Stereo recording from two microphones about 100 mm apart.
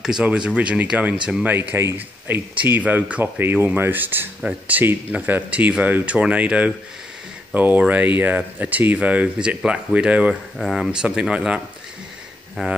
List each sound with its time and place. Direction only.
0.0 s speech: 10° right (ahead or behind)